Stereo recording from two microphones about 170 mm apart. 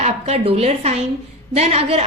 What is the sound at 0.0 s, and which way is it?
A woman's voice, 35° right (ahead or behind).